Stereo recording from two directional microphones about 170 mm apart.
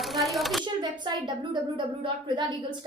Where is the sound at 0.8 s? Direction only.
25° right (ahead or behind).